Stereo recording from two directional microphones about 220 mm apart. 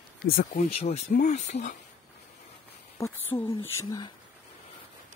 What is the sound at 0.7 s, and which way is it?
Speech, 30° left (ahead or behind).